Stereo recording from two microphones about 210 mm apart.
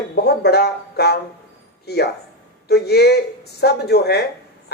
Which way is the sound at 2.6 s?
50° left (ahead or behind).